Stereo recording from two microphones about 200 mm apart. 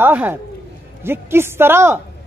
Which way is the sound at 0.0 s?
10° right (ahead or behind).